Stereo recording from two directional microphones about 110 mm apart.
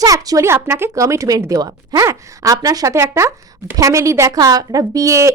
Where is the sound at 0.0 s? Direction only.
35° right (ahead or behind).